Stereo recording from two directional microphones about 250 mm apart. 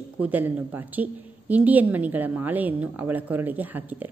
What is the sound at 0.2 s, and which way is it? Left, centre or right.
A woman's voice, centre.